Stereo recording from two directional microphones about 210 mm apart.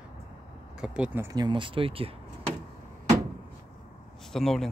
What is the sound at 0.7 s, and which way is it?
Speech, 5° right (ahead or behind).